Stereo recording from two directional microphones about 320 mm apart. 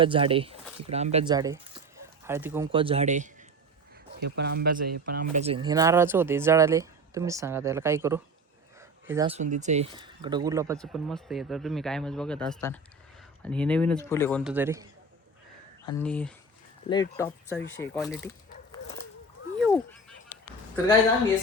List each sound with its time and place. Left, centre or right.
0.0 s speech: centre
2.7 s speech: centre
4.4 s speech: right; by 10.8 s centre
10.8 s speech: centre
15.9 s speech: centre
17.6 s speech: left
18.7 s dog: centre
19.5 s a sound: centre